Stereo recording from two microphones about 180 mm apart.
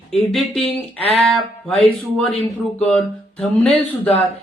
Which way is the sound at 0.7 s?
35° left (ahead or behind).